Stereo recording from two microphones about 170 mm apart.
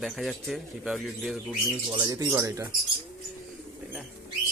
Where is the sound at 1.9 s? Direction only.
20° right (ahead or behind).